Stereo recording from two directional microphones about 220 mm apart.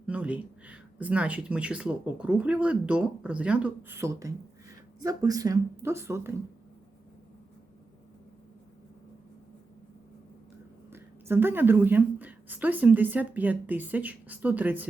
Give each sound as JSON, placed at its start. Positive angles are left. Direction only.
{"t": 0.0, "sound": "speech", "side_deg": -5}
{"t": 10.9, "sound": "speech", "side_deg": -10}